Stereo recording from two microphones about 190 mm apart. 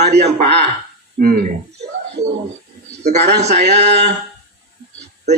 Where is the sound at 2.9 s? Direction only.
35° right (ahead or behind).